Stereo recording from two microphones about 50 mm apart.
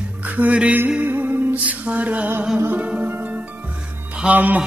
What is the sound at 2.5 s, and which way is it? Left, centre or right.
Music, right.